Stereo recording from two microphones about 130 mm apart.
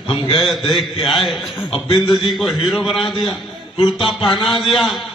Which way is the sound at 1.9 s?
35° left (ahead or behind).